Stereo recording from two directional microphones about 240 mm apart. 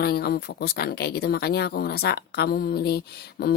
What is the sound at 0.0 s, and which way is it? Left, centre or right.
Speech, left.